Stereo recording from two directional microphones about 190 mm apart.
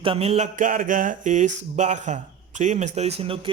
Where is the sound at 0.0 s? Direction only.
30° right (ahead or behind).